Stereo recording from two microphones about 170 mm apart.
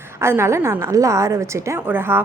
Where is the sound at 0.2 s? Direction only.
15° right (ahead or behind).